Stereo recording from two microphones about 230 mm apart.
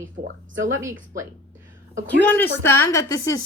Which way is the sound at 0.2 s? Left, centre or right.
Right.